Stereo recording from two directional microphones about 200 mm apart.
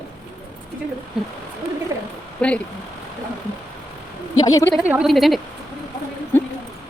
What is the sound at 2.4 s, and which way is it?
Speech, 5° left (ahead or behind).